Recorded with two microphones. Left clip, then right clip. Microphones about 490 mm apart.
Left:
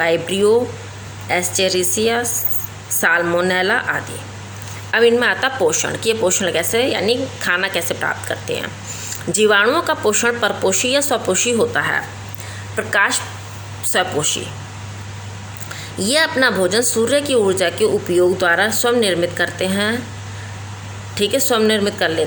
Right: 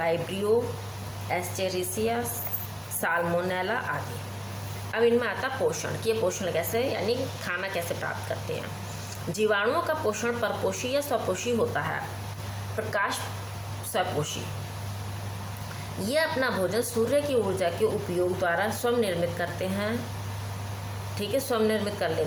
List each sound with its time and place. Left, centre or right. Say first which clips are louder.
0.0 s a woman's voice: left 12 dB; centre
4.9 s a woman's voice: left 11 dB; right
16.0 s a woman's voice: left 11 dB; right
21.2 s a woman's voice: left 10 dB; right